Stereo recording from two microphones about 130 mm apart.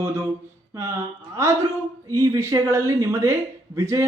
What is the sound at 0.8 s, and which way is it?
Speech, 20° right (ahead or behind).